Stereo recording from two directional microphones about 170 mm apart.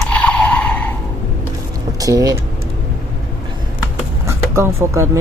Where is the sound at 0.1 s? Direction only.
5° left (ahead or behind).